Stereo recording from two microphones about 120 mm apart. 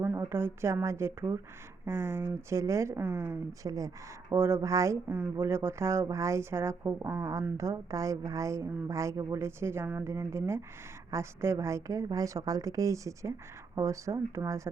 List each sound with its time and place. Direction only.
0.0 s speech: 20° right (ahead or behind)
3.0 s speech: 10° right (ahead or behind)
3.6 s speech: 30° right (ahead or behind)
5.0 s speech: 10° right (ahead or behind)
5.4 s speech: 20° right (ahead or behind)